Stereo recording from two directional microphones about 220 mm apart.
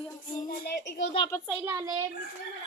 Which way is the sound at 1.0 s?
30° left (ahead or behind).